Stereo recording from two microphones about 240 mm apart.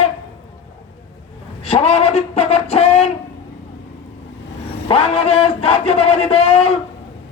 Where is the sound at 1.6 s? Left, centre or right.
Left.